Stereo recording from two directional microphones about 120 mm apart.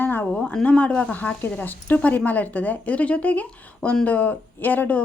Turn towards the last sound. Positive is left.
turn(degrees=15)  # may be behind; listen again after turning